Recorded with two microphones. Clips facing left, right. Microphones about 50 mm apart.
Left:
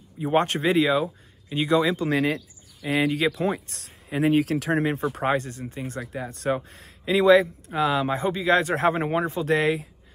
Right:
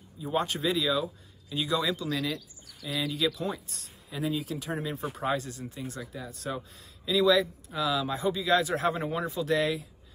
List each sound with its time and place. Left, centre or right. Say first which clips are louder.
0.2 s speech: left 7 dB; left
2.1 s speech: left 8 dB; left
4.9 s speech: left 6 dB; left